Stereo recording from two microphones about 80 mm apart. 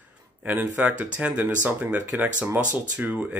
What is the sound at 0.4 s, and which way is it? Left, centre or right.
Speech, right.